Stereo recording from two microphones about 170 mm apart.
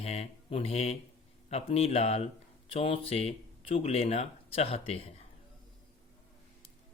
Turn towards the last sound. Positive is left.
turn(degrees=35)  # may be behind; listen again after turning